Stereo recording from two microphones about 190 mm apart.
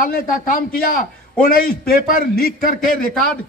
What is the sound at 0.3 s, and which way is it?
A man's voice, 45° left (ahead or behind).